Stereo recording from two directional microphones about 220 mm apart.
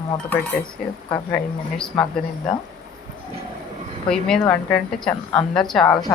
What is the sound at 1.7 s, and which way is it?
Speech, 5° left (ahead or behind).